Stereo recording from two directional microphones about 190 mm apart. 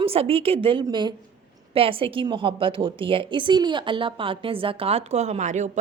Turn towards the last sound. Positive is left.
turn(degrees=-40)  # may be behind; listen again after turning